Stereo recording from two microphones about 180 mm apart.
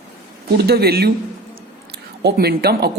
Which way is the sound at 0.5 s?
60° right (ahead or behind).